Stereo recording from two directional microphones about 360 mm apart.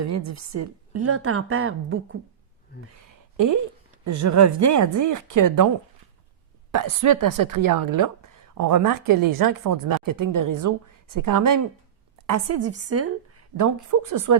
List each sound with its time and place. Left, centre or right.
0.0 s a woman's voice: right
3.3 s a woman's voice: right
6.7 s speech: right
12.2 s a woman's voice: right